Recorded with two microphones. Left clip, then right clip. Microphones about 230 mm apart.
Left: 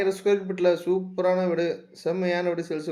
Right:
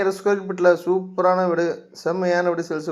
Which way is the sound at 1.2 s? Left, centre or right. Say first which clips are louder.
Right 5 dB; right.